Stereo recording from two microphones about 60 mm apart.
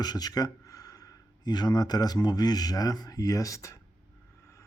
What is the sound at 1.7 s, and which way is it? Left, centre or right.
Speech, left.